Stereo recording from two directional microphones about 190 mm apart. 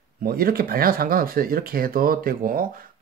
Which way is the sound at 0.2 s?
50° right (ahead or behind).